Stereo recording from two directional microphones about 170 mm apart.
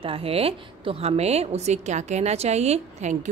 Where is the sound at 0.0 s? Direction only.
35° right (ahead or behind).